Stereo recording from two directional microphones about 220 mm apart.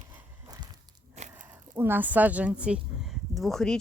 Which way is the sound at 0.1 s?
15° right (ahead or behind).